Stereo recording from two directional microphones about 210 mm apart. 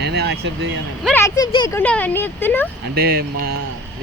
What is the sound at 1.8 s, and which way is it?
Speech, 10° left (ahead or behind).